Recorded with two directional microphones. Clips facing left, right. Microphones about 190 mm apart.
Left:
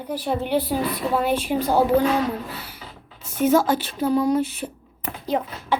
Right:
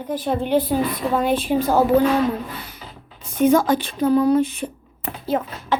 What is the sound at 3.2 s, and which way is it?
A woman's voice, 5° left (ahead or behind).